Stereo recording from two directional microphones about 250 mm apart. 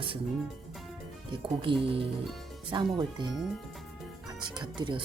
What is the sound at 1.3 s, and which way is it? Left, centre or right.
Speech, centre.